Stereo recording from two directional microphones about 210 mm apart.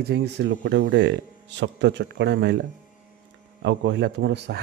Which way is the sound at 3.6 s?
60° right (ahead or behind).